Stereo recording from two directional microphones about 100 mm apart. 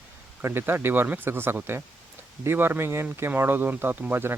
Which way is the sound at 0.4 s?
20° right (ahead or behind).